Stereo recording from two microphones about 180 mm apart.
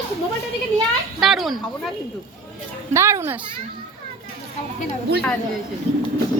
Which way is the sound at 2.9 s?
15° right (ahead or behind).